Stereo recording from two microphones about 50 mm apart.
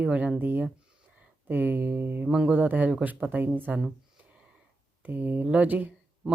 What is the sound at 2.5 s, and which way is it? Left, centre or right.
Speech, right.